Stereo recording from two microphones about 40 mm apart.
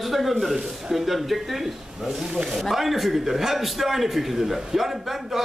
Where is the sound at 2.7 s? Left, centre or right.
Centre.